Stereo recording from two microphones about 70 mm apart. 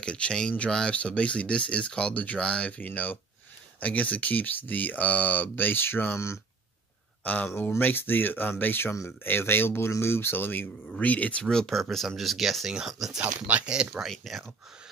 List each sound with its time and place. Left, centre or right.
0.0 s speech: centre; by 6.1 s left
6.1 s speech: left
7.4 s speech: left
11.4 s speech: centre
14.0 s speech: centre